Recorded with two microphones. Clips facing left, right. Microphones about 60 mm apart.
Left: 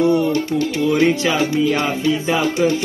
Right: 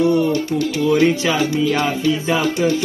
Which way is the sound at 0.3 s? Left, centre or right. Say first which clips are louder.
Even; left.